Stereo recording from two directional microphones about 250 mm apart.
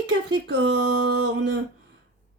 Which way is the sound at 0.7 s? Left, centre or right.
Right.